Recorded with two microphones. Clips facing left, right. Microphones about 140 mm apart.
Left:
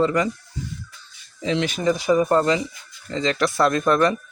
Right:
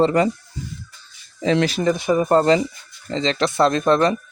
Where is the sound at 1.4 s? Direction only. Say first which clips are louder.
Right 5 dB; 50° right (ahead or behind).